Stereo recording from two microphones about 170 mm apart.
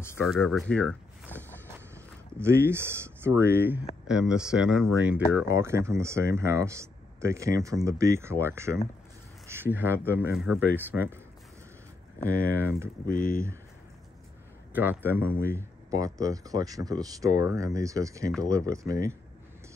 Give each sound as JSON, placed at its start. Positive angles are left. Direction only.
{"t": 0.2, "sound": "speech", "side_deg": 0}
{"t": 2.3, "sound": "speech", "side_deg": -15}
{"t": 9.5, "sound": "a sound", "side_deg": -15}
{"t": 9.8, "sound": "speech", "side_deg": -10}
{"t": 12.3, "sound": "speech", "side_deg": -15}
{"t": 14.7, "sound": "speech", "side_deg": -10}